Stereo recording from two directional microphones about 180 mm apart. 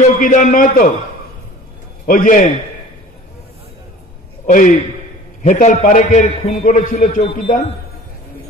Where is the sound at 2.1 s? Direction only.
50° left (ahead or behind).